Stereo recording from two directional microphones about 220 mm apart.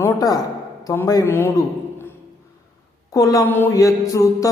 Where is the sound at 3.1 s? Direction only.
15° left (ahead or behind).